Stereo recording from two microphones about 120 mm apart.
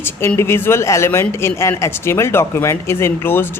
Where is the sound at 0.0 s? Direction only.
20° left (ahead or behind).